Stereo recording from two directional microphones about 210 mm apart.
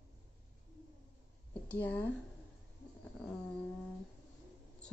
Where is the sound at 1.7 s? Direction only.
10° left (ahead or behind).